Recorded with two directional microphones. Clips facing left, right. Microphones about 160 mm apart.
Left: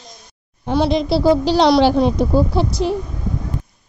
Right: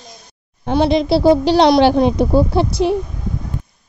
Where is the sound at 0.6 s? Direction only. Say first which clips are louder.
Right 2 dB; 65° right (ahead or behind).